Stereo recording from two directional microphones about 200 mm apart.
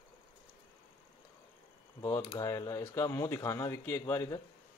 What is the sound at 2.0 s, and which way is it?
Speech, 15° left (ahead or behind).